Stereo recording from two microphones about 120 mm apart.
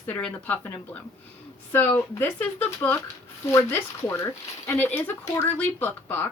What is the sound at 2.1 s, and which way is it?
Speech, 15° left (ahead or behind).